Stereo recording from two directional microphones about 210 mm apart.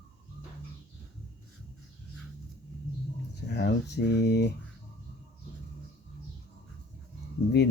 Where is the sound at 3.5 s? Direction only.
55° left (ahead or behind).